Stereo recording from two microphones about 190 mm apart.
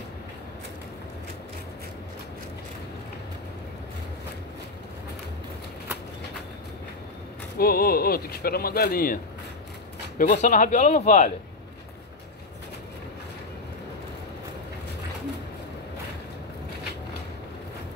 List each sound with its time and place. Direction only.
7.5 s speech: 55° left (ahead or behind)